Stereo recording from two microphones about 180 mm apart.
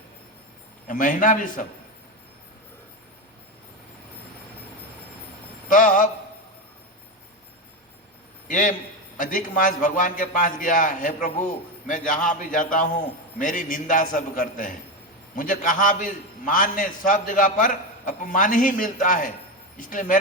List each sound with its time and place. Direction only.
0.9 s a man's voice: 45° left (ahead or behind)
5.6 s a sound: 45° left (ahead or behind)
8.4 s a man's voice: 45° left (ahead or behind)